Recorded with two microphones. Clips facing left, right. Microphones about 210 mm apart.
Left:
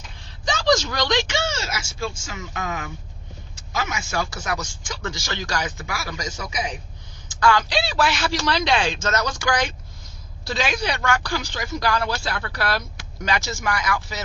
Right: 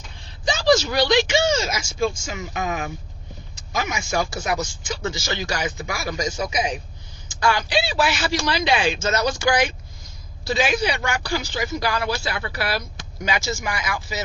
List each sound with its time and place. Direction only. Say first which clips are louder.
0.4 s speech: right 2 dB; 10° right (ahead or behind)
13.7 s speech: left 3 dB; 15° right (ahead or behind)